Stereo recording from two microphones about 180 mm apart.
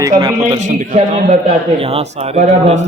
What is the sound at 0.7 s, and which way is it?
Speech, 40° right (ahead or behind).